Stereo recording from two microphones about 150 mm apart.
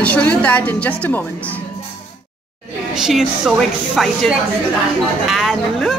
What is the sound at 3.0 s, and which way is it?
A woman's voice, 5° right (ahead or behind).